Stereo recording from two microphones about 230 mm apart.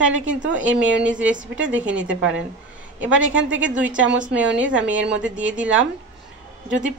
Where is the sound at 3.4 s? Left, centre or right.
Right.